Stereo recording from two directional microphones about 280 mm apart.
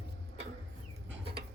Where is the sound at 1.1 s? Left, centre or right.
Right.